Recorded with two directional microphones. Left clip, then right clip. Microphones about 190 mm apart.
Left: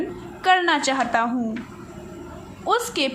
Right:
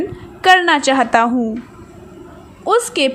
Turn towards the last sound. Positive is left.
turn(degrees=-30)  # may be behind; listen again after turning